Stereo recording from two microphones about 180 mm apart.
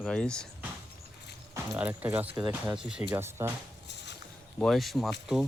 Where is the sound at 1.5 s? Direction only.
10° right (ahead or behind).